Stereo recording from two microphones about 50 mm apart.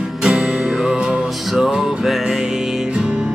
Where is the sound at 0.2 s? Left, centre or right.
Centre.